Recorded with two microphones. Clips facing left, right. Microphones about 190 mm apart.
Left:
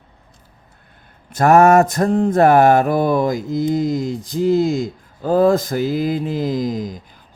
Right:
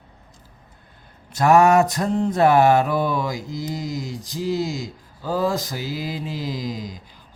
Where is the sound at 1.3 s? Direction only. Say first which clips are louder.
Left 4 dB; 50° left (ahead or behind).